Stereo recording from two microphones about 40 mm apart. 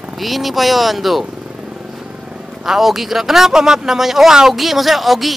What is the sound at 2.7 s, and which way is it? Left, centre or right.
Speech, centre.